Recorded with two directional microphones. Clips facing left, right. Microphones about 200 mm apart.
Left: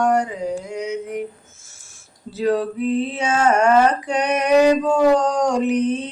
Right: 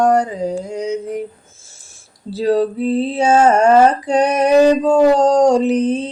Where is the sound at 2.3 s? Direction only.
35° right (ahead or behind).